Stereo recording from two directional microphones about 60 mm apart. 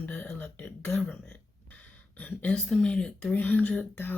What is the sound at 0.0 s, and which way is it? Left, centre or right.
Throat clearing, left.